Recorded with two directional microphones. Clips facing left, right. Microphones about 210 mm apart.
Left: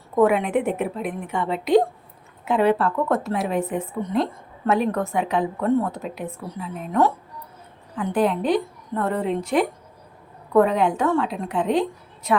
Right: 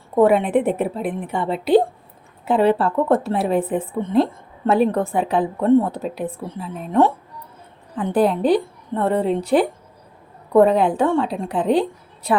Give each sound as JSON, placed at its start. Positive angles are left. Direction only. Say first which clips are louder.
{"t": 0.2, "sound": "speech", "louder": "right 3 dB", "side_deg": -35}
{"t": 8.1, "sound": "speech", "louder": "right 4 dB", "side_deg": -35}